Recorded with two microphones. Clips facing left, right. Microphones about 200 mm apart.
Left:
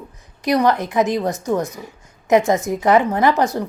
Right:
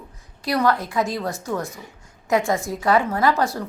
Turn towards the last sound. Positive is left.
turn(degrees=20)  # may be behind; listen again after turning